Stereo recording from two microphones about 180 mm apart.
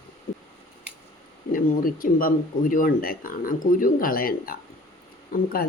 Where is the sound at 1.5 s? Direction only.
50° left (ahead or behind).